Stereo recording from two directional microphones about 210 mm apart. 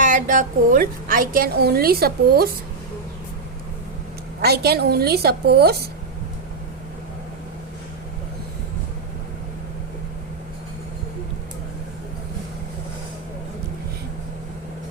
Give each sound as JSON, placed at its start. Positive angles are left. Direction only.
{"t": 0.0, "sound": "a woman's voice", "side_deg": -35}
{"t": 4.4, "sound": "a woman's voice", "side_deg": -50}